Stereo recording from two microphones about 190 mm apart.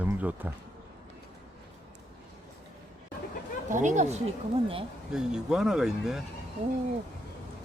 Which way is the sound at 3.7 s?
40° right (ahead or behind).